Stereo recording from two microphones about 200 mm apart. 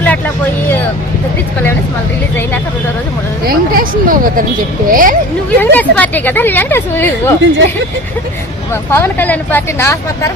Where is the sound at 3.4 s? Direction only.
50° right (ahead or behind).